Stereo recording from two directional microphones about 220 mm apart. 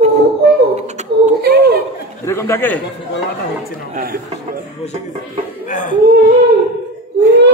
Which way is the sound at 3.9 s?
40° right (ahead or behind).